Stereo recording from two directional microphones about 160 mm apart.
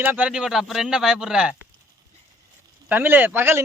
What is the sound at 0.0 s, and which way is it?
Speech, 10° right (ahead or behind).